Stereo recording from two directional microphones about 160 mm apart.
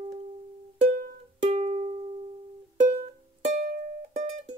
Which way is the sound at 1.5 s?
35° right (ahead or behind).